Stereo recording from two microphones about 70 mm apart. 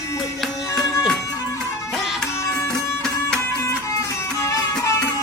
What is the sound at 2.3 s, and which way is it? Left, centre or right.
Music, left.